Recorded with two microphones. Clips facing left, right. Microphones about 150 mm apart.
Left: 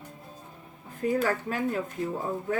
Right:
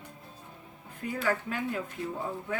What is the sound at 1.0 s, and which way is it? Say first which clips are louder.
Speech: left 5 dB; 45° left (ahead or behind).